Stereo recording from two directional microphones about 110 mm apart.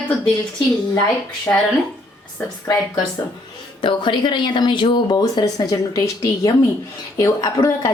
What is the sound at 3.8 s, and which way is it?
A woman's voice, 45° left (ahead or behind).